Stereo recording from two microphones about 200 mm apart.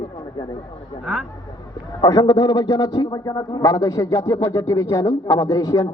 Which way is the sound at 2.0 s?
20° left (ahead or behind).